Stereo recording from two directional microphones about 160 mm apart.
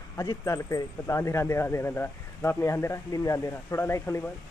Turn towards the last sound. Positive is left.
turn(degrees=15)  # may be behind; listen again after turning